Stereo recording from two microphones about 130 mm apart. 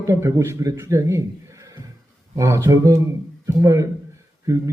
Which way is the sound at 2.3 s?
25° right (ahead or behind).